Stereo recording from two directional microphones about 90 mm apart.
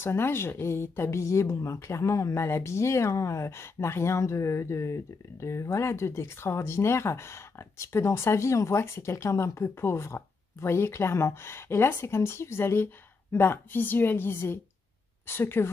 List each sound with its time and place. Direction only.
0.0 s a woman's voice: 25° left (ahead or behind)